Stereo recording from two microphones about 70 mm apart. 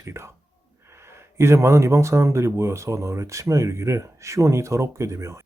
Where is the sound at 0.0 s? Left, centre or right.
Right.